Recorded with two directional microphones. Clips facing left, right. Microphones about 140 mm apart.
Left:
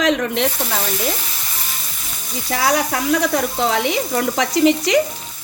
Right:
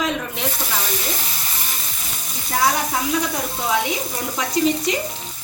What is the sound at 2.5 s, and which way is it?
A woman's voice, 75° left (ahead or behind).